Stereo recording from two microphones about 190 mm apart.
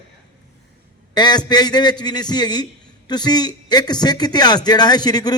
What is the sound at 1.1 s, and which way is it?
A man's voice, 20° left (ahead or behind).